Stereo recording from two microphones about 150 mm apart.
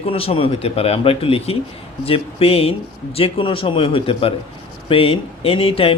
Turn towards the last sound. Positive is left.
turn(degrees=40)  # may be behind; listen again after turning